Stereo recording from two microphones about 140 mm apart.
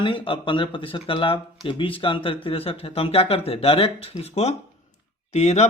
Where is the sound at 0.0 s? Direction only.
35° left (ahead or behind).